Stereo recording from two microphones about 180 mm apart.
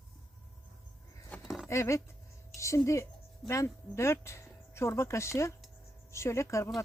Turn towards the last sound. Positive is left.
turn(degrees=15)  # may be behind; listen again after turning